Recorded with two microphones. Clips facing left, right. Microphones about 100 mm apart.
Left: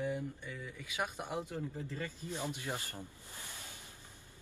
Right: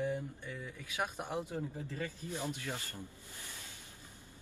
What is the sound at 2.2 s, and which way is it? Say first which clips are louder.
Speech: even; 20° left (ahead or behind).